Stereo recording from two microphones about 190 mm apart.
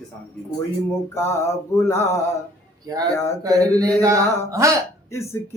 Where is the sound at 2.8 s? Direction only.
20° right (ahead or behind).